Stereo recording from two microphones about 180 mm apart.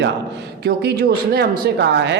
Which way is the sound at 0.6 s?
60° right (ahead or behind).